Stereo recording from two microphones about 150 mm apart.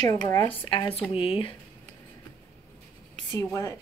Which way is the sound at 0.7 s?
35° left (ahead or behind).